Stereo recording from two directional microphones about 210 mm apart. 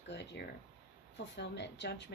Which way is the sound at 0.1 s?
55° left (ahead or behind).